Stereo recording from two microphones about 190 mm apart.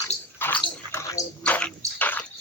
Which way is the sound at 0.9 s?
15° left (ahead or behind).